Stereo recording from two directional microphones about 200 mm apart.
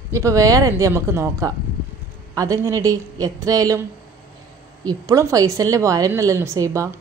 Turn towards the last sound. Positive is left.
turn(degrees=-15)  # may be behind; listen again after turning